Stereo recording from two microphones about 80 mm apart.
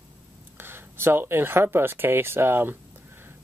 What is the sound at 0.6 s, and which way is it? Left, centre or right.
Speech, right.